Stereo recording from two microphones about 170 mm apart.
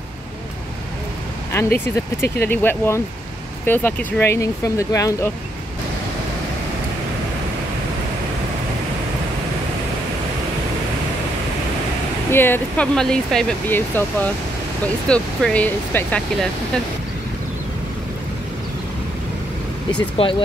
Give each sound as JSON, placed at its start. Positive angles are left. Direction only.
{"t": 1.5, "sound": "speech", "side_deg": 15}
{"t": 12.3, "sound": "speech", "side_deg": 10}
{"t": 20.2, "sound": "speech", "side_deg": 35}